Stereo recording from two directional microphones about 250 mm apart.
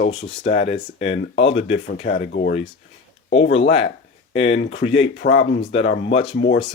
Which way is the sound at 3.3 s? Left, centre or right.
Left.